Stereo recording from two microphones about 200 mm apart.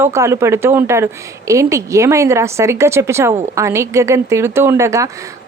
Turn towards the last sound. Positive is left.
turn(degrees=-15)  # may be behind; listen again after turning